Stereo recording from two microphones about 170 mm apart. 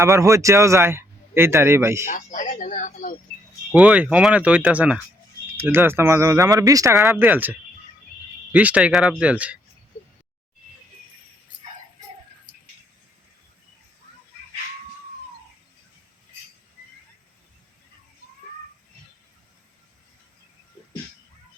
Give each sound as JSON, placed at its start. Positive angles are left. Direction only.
{"t": 0.0, "sound": "a man's voice", "side_deg": -20}
{"t": 2.1, "sound": "speech", "side_deg": 45}
{"t": 3.7, "sound": "a man's voice", "side_deg": -5}
{"t": 8.5, "sound": "a man's voice", "side_deg": -10}